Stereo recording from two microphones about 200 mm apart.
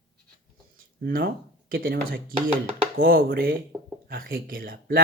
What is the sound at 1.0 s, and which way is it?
Speech, 50° right (ahead or behind).